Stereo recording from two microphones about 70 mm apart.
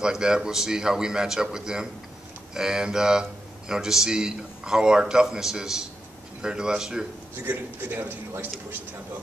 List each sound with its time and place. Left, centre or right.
0.0 s a man's voice: centre
7.4 s a man's voice: right